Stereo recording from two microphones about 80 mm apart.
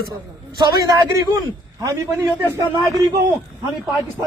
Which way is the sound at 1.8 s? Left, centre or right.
Right.